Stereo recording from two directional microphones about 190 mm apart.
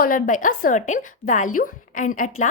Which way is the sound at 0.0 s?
45° left (ahead or behind).